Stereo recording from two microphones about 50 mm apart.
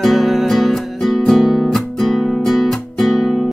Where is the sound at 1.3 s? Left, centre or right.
Centre.